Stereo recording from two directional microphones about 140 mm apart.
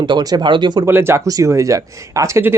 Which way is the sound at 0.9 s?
15° right (ahead or behind).